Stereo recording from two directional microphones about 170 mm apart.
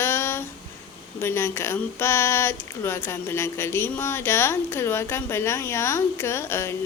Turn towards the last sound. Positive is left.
turn(degrees=15)  # may be behind; listen again after turning